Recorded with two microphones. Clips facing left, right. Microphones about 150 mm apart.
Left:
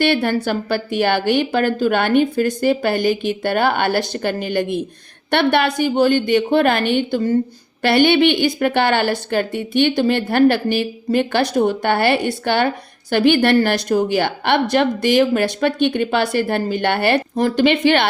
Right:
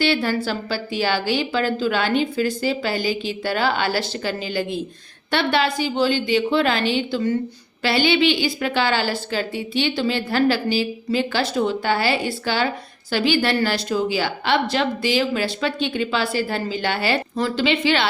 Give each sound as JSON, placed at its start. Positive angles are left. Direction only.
{"t": 0.0, "sound": "a woman's voice", "side_deg": 55}